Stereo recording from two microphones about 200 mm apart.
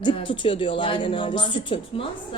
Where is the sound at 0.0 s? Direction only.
25° left (ahead or behind).